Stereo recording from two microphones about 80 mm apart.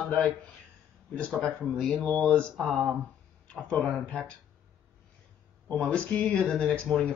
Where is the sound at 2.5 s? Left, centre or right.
Centre.